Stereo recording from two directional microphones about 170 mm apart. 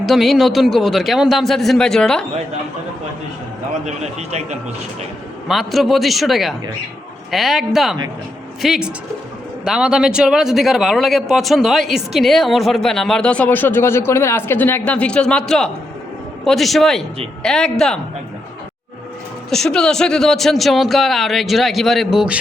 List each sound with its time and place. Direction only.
0.0 s speech: centre (ahead or behind)
3.8 s a man's voice: 40° right (ahead or behind)
5.5 s speech: centre (ahead or behind)
19.5 s speech: 5° left (ahead or behind)